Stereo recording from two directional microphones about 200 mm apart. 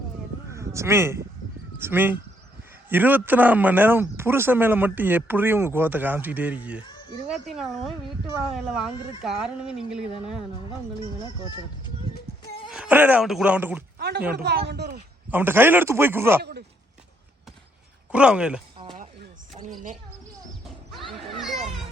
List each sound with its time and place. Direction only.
0.5 s a man's voice: 15° right (ahead or behind)
12.7 s a man's voice: 5° right (ahead or behind)
14.3 s speech: 55° right (ahead or behind)
15.3 s a man's voice: 10° right (ahead or behind)
16.4 s speech: 55° right (ahead or behind)
18.1 s speech: 5° right (ahead or behind)
19.6 s a sound: 25° right (ahead or behind)
20.7 s neigh: centre (ahead or behind)
21.3 s children playing: centre (ahead or behind)